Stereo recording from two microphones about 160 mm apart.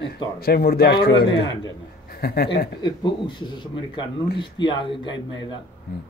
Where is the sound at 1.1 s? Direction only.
30° left (ahead or behind).